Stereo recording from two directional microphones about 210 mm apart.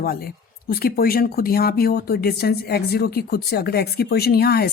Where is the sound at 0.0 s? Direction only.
45° left (ahead or behind).